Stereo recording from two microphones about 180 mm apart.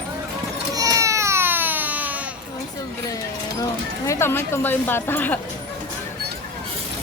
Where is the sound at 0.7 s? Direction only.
20° right (ahead or behind).